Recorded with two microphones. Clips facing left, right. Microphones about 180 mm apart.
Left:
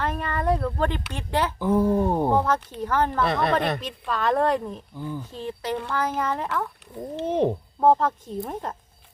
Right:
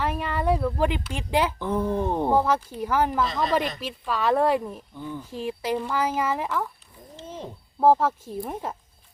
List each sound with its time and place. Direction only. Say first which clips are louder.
0.0 s speech: even; 10° right (ahead or behind)
1.5 s speech: left 4 dB; 10° left (ahead or behind)
2.3 s speech: right 1 dB; 10° right (ahead or behind)
3.2 s speech: left 4 dB; 60° left (ahead or behind)
3.8 s speech: even; 5° right (ahead or behind)
4.9 s speech: left 2 dB; 10° left (ahead or behind)
5.3 s speech: right 5 dB; 10° right (ahead or behind)
7.2 s speech: left 15 dB; 65° left (ahead or behind)
7.8 s speech: right 1 dB; 5° right (ahead or behind)